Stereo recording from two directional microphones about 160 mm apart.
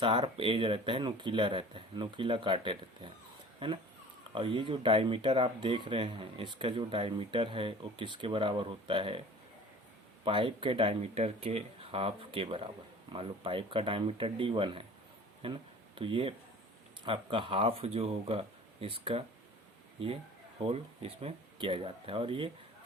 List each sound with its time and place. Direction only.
0.0 s speech: 30° right (ahead or behind)
10.2 s speech: 35° right (ahead or behind)
20.7 s speech: 40° right (ahead or behind)